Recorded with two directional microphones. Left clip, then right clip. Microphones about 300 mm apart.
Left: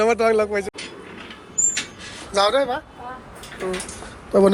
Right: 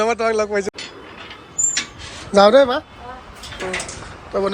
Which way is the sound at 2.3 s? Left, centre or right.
Right.